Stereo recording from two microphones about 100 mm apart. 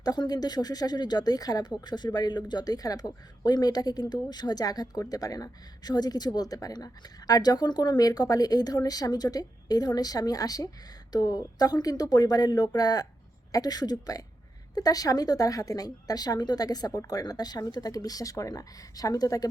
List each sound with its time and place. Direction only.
0.0 s speech: 40° left (ahead or behind)